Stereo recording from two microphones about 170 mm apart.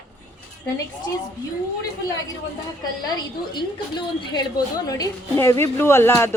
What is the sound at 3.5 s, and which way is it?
A woman's voice, 25° left (ahead or behind).